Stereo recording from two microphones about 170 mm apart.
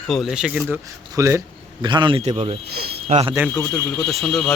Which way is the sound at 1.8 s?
25° right (ahead or behind).